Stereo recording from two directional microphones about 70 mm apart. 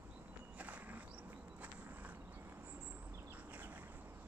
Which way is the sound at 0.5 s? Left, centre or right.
Right.